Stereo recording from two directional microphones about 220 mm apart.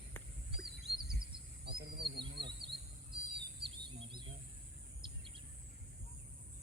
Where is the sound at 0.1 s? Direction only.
10° left (ahead or behind).